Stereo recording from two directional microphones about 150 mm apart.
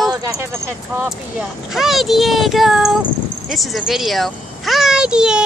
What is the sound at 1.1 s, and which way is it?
A child's voice, 5° right (ahead or behind).